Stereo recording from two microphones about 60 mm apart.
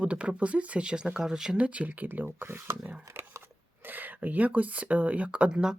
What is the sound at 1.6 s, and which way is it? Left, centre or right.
Speech, right.